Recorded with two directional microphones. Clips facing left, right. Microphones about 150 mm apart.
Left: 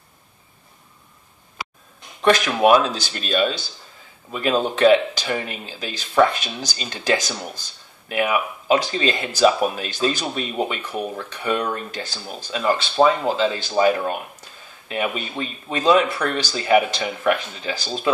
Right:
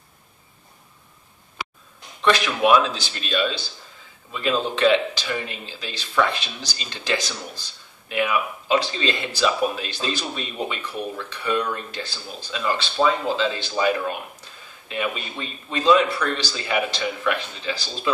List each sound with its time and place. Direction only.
2.2 s a man's voice: 45° left (ahead or behind)